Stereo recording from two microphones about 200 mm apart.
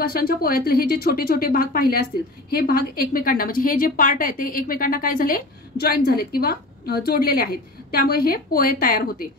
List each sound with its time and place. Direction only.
0.0 s a woman's voice: 50° left (ahead or behind)